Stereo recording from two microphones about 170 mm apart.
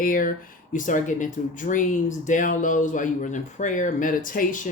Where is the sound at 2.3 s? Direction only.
50° left (ahead or behind).